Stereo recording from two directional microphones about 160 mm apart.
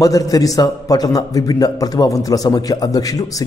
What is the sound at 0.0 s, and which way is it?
A man's voice, 20° left (ahead or behind).